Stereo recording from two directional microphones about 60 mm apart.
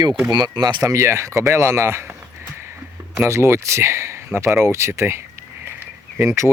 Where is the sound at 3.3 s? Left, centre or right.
Right.